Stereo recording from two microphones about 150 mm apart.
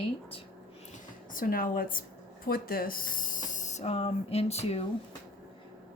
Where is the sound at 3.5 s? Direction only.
50° left (ahead or behind).